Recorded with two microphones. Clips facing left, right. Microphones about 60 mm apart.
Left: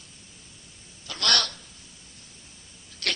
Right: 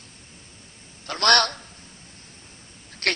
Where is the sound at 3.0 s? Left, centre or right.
Right.